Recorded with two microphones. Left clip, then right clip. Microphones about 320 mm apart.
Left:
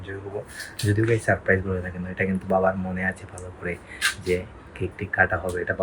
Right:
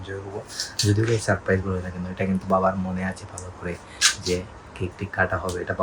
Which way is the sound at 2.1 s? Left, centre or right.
Centre.